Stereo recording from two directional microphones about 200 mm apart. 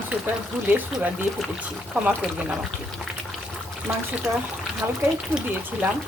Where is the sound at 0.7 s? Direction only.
10° right (ahead or behind).